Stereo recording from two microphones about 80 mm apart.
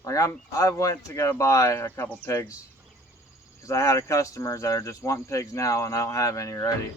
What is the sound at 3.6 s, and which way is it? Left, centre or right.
Speech, left.